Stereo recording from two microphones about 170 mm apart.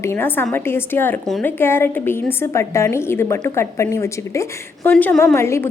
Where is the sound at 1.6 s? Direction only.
15° left (ahead or behind).